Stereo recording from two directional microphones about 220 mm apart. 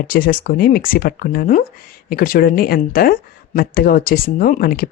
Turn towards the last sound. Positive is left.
turn(degrees=40)  # may be behind; listen again after turning